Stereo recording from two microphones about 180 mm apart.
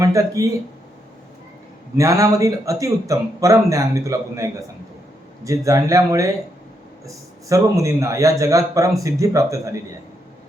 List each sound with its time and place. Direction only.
0.0 s speech: 15° right (ahead or behind)
2.0 s a man's voice: 20° right (ahead or behind)
5.5 s a man's voice: 20° right (ahead or behind)